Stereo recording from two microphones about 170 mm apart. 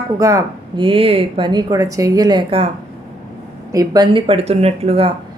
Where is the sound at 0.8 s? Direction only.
30° right (ahead or behind).